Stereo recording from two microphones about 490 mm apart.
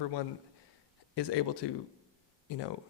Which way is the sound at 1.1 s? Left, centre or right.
Left.